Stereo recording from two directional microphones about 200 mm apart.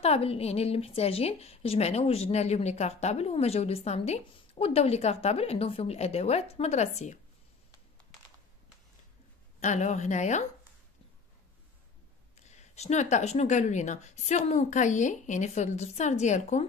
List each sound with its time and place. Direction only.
0.0 s a woman's voice: 30° left (ahead or behind)
9.6 s a woman's voice: 35° left (ahead or behind)
12.4 s a woman's voice: 35° left (ahead or behind)